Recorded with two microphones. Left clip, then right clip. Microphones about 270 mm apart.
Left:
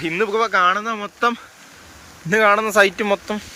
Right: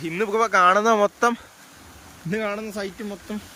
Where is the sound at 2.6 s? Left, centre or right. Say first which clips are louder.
Left 16 dB; left.